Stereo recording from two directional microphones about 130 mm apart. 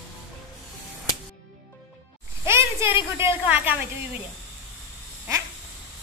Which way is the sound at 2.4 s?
20° right (ahead or behind).